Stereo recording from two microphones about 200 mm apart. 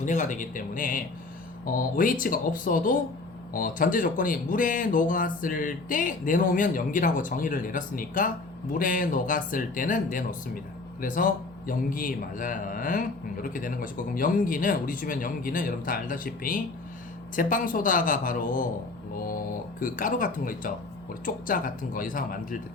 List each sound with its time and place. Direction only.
0.0 s a man's voice: 40° left (ahead or behind)
19.8 s a man's voice: 40° left (ahead or behind)